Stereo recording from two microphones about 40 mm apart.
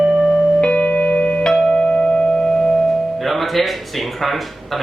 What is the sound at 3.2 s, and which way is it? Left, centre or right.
Music, centre.